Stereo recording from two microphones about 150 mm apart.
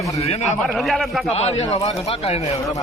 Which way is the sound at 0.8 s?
Centre (ahead or behind).